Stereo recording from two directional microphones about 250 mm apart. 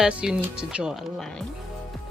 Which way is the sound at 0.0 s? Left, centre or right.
Centre.